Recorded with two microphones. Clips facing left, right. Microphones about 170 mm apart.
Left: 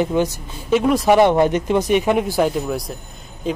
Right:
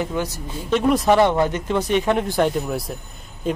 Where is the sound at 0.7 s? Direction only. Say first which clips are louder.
Left 2 dB; centre (ahead or behind).